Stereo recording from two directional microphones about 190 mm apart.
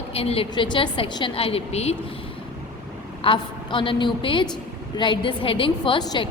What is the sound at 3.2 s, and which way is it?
A woman's voice, 25° left (ahead or behind).